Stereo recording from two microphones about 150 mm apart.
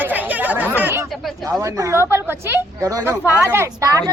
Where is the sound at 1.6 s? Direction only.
20° right (ahead or behind).